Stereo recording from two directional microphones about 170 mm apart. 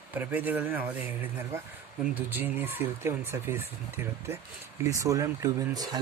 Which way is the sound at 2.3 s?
10° right (ahead or behind).